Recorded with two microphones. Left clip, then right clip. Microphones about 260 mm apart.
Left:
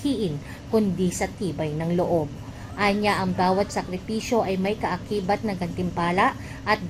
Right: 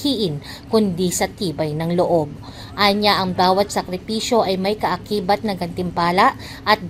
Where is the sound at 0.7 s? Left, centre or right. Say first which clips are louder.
Right 5 dB; right.